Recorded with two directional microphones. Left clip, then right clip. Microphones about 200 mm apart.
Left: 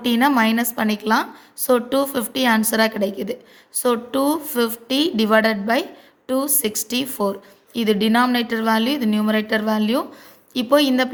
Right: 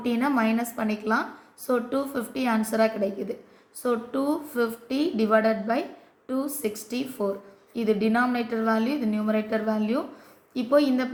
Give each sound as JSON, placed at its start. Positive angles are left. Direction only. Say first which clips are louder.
{"t": 0.0, "sound": "speech", "louder": "left 8 dB", "side_deg": 45}